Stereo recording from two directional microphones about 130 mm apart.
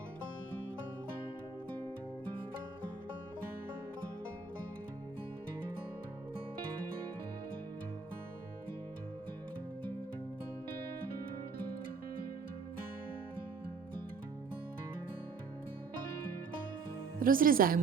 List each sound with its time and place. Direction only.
17.2 s speech: 90° right